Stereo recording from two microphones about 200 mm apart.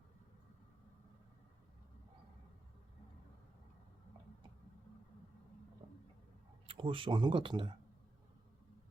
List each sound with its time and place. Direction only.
6.7 s speech: 25° right (ahead or behind)